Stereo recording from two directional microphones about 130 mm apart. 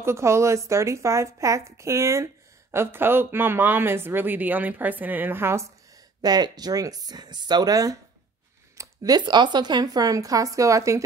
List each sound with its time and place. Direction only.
0.0 s speech: 20° right (ahead or behind)
6.2 s speech: 30° right (ahead or behind)